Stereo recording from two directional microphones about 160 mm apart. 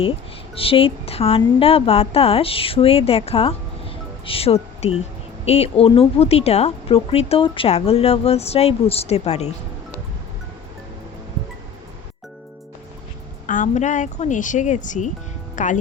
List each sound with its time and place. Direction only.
0.5 s a woman's voice: 35° left (ahead or behind)
13.5 s speech: 50° left (ahead or behind)